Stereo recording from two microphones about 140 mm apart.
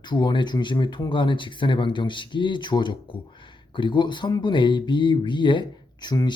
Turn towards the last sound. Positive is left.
turn(degrees=30)  # may be behind; listen again after turning